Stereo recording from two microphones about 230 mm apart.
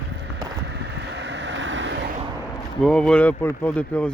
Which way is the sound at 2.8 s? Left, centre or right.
Centre.